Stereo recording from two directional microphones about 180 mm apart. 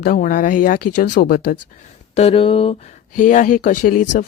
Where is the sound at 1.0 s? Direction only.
70° left (ahead or behind).